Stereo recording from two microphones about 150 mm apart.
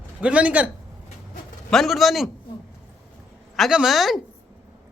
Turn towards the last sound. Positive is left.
turn(degrees=0)  # may be behind; listen again after turning